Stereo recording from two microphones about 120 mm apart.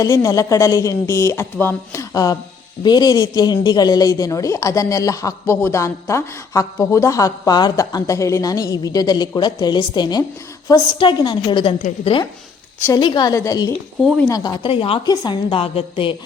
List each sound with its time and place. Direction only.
0.0 s a man's voice: 30° left (ahead or behind)
13.0 s a woman's voice: 40° left (ahead or behind)
14.6 s a woman's voice: 50° left (ahead or behind)
15.1 s a woman's voice: 35° left (ahead or behind)